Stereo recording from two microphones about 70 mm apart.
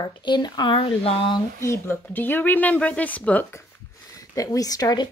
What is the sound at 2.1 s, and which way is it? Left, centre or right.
Speech, left.